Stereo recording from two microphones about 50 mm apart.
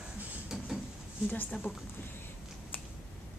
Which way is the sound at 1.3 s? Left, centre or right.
Left.